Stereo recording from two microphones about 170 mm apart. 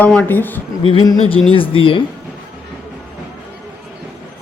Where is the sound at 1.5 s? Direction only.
30° left (ahead or behind).